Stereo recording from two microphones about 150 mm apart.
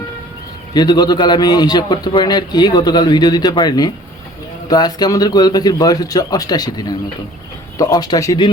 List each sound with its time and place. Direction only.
0.7 s a man's voice: 25° left (ahead or behind)